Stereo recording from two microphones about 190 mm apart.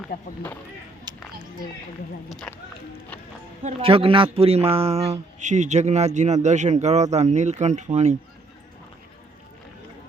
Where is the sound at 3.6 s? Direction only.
30° right (ahead or behind).